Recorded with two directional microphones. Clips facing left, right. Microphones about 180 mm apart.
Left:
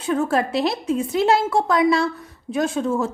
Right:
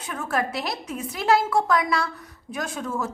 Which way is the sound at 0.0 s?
30° left (ahead or behind).